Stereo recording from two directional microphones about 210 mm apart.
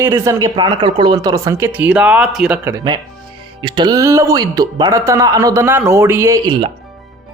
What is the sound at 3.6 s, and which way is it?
A man's voice, 20° right (ahead or behind).